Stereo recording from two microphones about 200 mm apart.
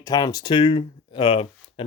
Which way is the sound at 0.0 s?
20° left (ahead or behind).